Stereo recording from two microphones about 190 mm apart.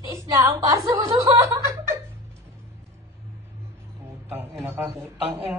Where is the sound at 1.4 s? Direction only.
15° right (ahead or behind).